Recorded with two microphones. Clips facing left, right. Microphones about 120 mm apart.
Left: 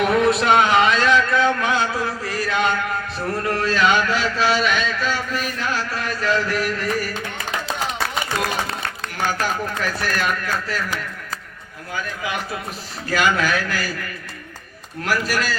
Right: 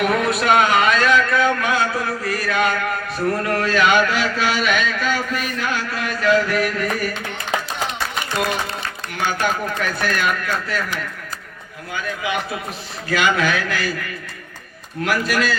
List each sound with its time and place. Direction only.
0.0 s a sound: 25° left (ahead or behind)
3.2 s speech: 30° left (ahead or behind)
9.2 s speech: 35° left (ahead or behind)
13.1 s speech: 40° left (ahead or behind)
15.0 s speech: 40° left (ahead or behind)